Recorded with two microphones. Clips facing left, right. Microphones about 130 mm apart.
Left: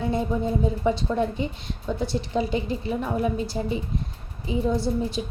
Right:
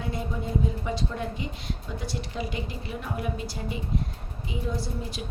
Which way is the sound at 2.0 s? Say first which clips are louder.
Left 9 dB; 25° left (ahead or behind).